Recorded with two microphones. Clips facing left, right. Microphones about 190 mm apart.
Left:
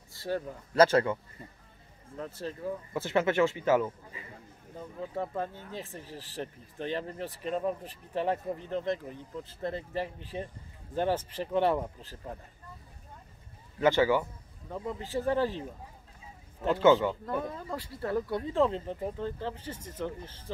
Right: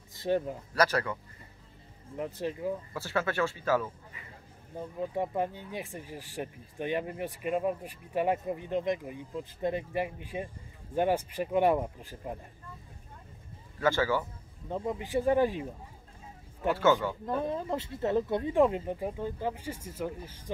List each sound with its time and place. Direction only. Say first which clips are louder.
0.1 s speech: right 4 dB; 20° right (ahead or behind)
0.7 s speech: left 6 dB; 25° left (ahead or behind)
2.1 s speech: right 4 dB; 15° right (ahead or behind)
2.9 s speech: left 4 dB; 20° left (ahead or behind)
4.7 s speech: right 3 dB; 15° right (ahead or behind)
13.7 s a man's voice: left 3 dB; 20° left (ahead or behind)
14.7 s speech: right 3 dB; 15° right (ahead or behind)
16.7 s a man's voice: left 4 dB; 15° left (ahead or behind)
17.3 s speech: right 3 dB; 20° right (ahead or behind)